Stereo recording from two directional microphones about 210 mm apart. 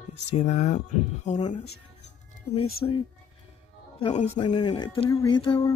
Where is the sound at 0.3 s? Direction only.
30° left (ahead or behind).